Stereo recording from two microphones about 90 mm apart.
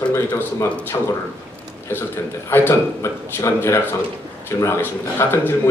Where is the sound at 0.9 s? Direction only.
25° left (ahead or behind).